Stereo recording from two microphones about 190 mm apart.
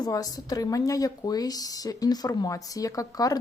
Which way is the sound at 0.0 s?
20° left (ahead or behind).